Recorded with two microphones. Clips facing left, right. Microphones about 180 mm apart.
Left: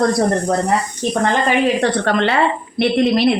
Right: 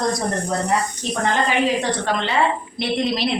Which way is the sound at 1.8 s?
65° left (ahead or behind).